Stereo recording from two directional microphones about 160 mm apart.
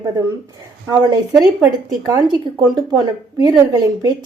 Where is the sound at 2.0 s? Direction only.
25° right (ahead or behind).